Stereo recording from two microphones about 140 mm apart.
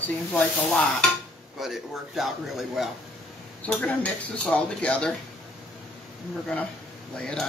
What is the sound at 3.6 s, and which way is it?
Speech, 10° left (ahead or behind).